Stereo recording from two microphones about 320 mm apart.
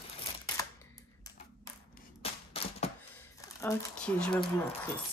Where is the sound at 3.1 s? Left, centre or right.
Centre.